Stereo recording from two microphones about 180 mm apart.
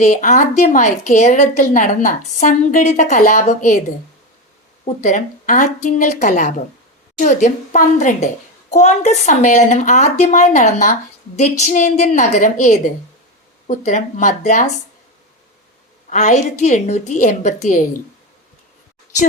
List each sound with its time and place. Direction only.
0.0 s a woman's voice: 45° left (ahead or behind)
5.0 s a woman's voice: 45° left (ahead or behind)
16.0 s speech: 40° left (ahead or behind)